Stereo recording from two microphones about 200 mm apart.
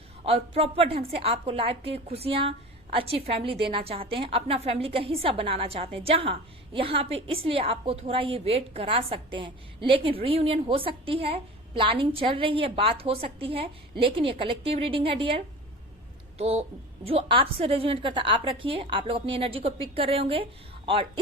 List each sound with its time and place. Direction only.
0.3 s a woman's voice: 30° right (ahead or behind)
16.4 s a woman's voice: 30° right (ahead or behind)